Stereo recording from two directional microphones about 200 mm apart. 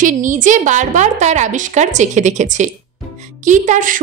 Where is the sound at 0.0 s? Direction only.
40° right (ahead or behind).